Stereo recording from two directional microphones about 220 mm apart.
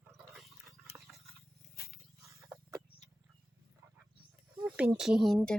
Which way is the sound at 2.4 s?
10° right (ahead or behind).